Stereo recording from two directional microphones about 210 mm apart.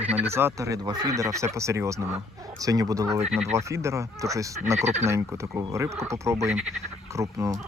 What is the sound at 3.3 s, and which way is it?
Speech, 30° right (ahead or behind).